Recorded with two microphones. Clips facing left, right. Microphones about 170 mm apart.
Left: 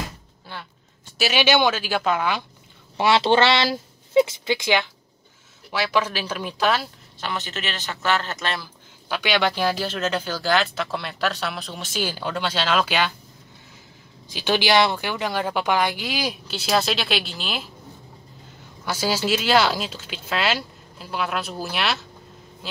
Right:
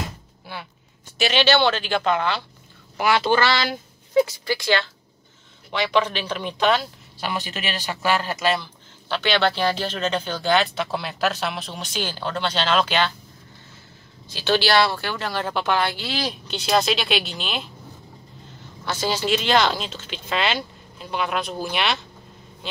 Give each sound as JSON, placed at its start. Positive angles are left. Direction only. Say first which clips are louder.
{"t": 0.5, "sound": "a sound", "louder": "right 2 dB", "side_deg": -10}
{"t": 1.1, "sound": "speech", "louder": "right 1 dB", "side_deg": 5}
{"t": 3.0, "sound": "speech", "louder": "left 2 dB", "side_deg": 25}
{"t": 5.7, "sound": "speech", "louder": "right 2 dB", "side_deg": 5}
{"t": 7.2, "sound": "speech", "louder": "right 1 dB", "side_deg": -10}
{"t": 9.1, "sound": "speech", "louder": "right 1 dB", "side_deg": 10}
{"t": 14.3, "sound": "speech", "louder": "even", "side_deg": 15}
{"t": 18.9, "sound": "speech", "louder": "even", "side_deg": 5}